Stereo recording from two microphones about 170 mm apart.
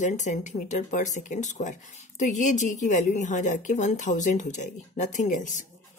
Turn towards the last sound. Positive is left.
turn(degrees=45)  # may be behind; listen again after turning